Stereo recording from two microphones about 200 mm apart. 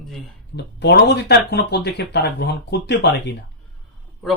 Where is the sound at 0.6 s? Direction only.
55° left (ahead or behind).